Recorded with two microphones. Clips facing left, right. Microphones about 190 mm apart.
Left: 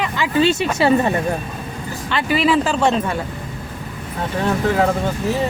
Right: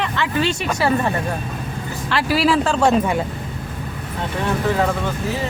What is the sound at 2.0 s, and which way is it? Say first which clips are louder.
Speech: even; centre (ahead or behind).